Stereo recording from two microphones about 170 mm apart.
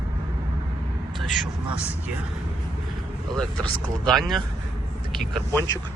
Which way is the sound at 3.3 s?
5° left (ahead or behind).